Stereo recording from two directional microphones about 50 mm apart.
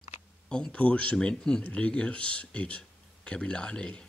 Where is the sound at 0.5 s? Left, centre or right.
Centre.